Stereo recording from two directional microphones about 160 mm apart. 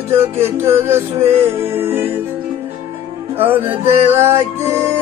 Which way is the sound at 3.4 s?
15° right (ahead or behind).